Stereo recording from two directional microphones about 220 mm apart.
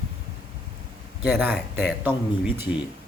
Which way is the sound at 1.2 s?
5° right (ahead or behind).